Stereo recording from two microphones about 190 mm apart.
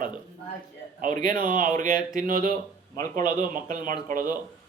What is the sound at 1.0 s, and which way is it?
A man's voice, 45° right (ahead or behind).